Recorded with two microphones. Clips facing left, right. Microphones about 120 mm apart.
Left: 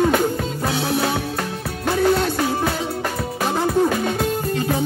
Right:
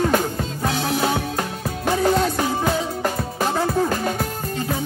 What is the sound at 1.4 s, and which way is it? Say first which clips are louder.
Music: even; 10° right (ahead or behind).